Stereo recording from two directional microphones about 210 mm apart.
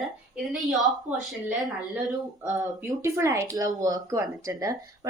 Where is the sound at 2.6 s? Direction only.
15° right (ahead or behind).